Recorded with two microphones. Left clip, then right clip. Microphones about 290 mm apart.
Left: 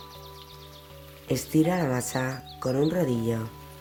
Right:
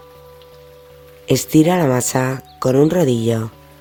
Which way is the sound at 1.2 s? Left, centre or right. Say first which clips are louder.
Right 11 dB; right.